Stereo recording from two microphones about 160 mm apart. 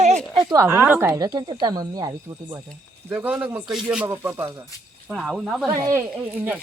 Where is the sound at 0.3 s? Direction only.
25° right (ahead or behind).